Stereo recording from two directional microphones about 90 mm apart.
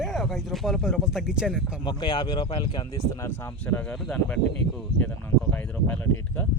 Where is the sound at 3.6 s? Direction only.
10° left (ahead or behind).